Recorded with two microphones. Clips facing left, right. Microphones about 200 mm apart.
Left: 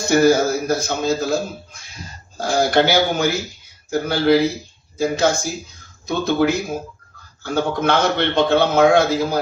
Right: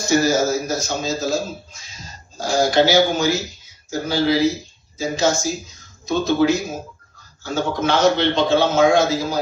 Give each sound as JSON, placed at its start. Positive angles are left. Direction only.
{"t": 0.0, "sound": "a man's voice", "side_deg": 60}